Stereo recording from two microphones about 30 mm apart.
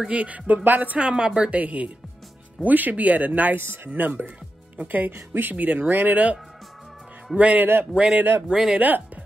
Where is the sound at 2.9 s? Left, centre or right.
Right.